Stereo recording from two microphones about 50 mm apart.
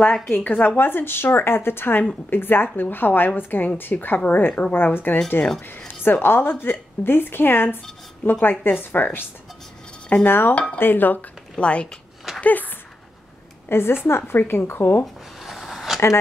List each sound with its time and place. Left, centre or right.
0.3 s a woman's voice: left
10.2 s a woman's voice: left
10.5 s speech: left
10.8 s a woman's voice: left
11.5 s speech: left
12.4 s speech: left
13.7 s a woman's voice: left
15.4 s a sound: centre